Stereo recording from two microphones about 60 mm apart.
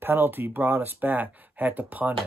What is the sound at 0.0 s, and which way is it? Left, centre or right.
Speech, right.